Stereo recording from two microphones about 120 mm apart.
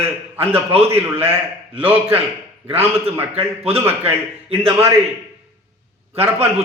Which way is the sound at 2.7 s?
55° right (ahead or behind).